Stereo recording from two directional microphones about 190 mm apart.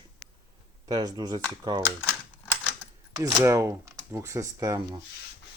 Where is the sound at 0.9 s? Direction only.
20° right (ahead or behind).